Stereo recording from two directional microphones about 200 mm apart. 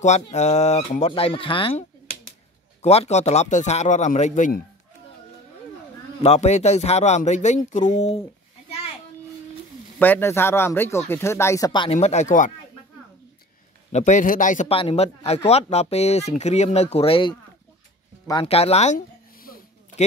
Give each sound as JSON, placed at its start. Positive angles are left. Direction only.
{"t": 0.0, "sound": "speech", "side_deg": 35}
{"t": 6.2, "sound": "speech", "side_deg": 30}
{"t": 9.9, "sound": "speech", "side_deg": 10}
{"t": 13.9, "sound": "speech", "side_deg": 35}
{"t": 14.8, "sound": "speech", "side_deg": 30}
{"t": 18.2, "sound": "music", "side_deg": 25}